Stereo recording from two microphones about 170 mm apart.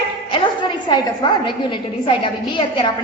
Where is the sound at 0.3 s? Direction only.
25° left (ahead or behind).